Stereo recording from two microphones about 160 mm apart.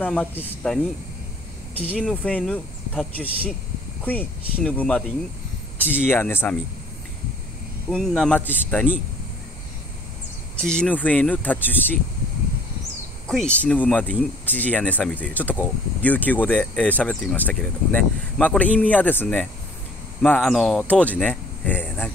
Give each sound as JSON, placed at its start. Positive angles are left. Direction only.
{"t": 0.0, "sound": "speech", "side_deg": 10}
{"t": 1.8, "sound": "speech", "side_deg": 10}
{"t": 7.9, "sound": "speech", "side_deg": 0}
{"t": 10.5, "sound": "speech", "side_deg": 5}
{"t": 13.3, "sound": "speech", "side_deg": 5}